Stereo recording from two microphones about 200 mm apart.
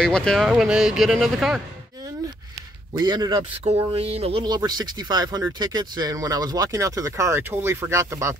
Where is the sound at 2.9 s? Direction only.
20° right (ahead or behind).